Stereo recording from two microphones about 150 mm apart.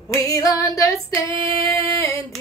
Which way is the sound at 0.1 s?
20° left (ahead or behind).